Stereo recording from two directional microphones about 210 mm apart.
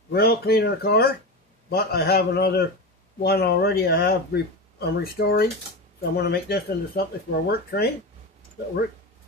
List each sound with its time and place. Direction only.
0.1 s speech: 50° left (ahead or behind)